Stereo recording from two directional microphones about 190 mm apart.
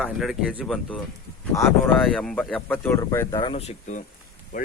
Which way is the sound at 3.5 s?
35° left (ahead or behind).